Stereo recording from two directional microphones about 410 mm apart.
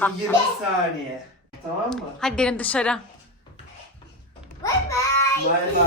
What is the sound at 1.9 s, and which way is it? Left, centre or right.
A woman's voice, centre.